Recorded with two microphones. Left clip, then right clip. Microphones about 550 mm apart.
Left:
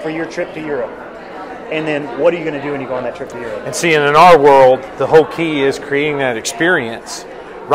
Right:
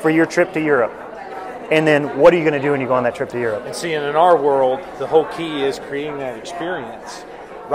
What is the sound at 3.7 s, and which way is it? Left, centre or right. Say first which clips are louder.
A man's voice: left 9 dB; left.